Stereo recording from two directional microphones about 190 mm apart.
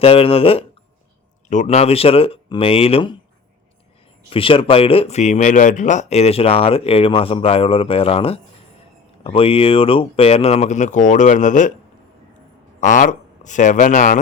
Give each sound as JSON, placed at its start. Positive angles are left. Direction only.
{"t": 0.0, "sound": "speech", "side_deg": 30}
{"t": 4.3, "sound": "speech", "side_deg": 30}
{"t": 12.8, "sound": "speech", "side_deg": 40}